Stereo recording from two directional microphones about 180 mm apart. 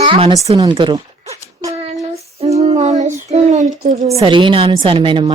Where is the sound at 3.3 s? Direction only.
45° right (ahead or behind).